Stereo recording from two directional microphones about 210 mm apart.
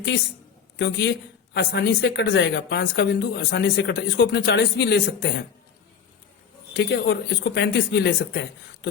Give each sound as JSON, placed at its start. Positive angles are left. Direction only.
{"t": 0.8, "sound": "a woman's voice", "side_deg": 55}
{"t": 6.7, "sound": "a woman's voice", "side_deg": 55}